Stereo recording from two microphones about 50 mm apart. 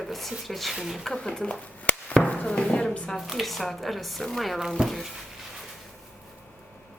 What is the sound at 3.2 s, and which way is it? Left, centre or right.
Speech, centre.